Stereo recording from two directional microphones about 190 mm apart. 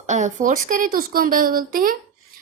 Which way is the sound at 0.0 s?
40° right (ahead or behind).